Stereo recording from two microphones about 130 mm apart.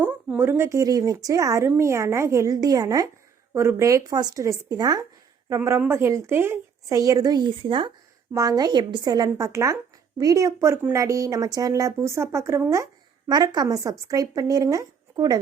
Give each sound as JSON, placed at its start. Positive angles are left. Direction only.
{"t": 0.0, "sound": "a woman's voice", "side_deg": -15}
{"t": 8.3, "sound": "a woman's voice", "side_deg": -25}